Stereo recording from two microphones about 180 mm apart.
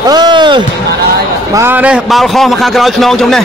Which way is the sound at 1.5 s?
10° right (ahead or behind).